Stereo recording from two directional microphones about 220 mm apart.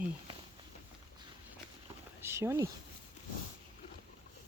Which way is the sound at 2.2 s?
10° right (ahead or behind).